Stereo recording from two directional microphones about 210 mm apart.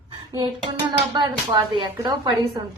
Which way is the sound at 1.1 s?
20° right (ahead or behind).